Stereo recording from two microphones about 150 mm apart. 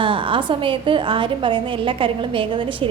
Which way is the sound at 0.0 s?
35° right (ahead or behind).